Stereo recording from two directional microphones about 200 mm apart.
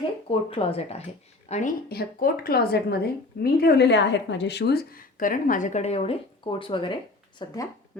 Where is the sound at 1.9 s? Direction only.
50° left (ahead or behind); by 7.7 s 20° left (ahead or behind).